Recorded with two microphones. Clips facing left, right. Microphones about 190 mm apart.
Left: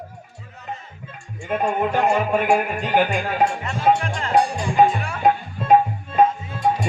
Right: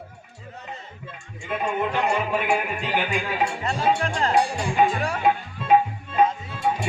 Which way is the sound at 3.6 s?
35° right (ahead or behind).